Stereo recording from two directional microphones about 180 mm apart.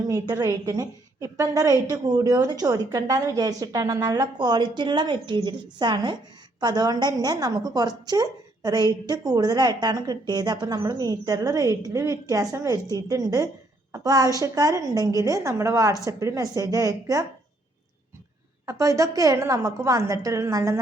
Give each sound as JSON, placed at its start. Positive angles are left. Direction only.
{"t": 0.1, "sound": "a woman's voice", "side_deg": -20}
{"t": 18.6, "sound": "a woman's voice", "side_deg": -15}